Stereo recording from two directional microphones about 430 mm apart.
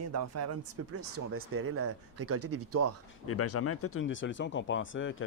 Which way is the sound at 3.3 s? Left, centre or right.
Left.